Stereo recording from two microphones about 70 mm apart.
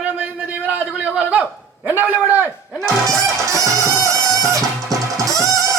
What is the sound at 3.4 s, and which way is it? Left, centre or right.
Music, right.